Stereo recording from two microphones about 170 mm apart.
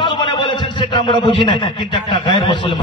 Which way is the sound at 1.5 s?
30° left (ahead or behind).